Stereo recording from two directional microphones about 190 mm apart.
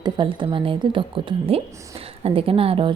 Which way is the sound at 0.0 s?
25° right (ahead or behind).